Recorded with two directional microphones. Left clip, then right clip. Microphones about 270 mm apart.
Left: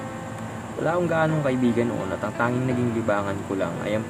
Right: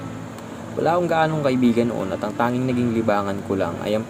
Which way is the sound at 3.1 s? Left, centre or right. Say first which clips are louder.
Right 2 dB; centre.